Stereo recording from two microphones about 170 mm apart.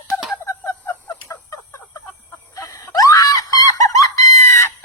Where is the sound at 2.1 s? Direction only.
20° left (ahead or behind).